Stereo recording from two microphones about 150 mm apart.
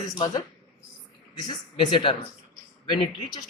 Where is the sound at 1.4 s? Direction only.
30° left (ahead or behind).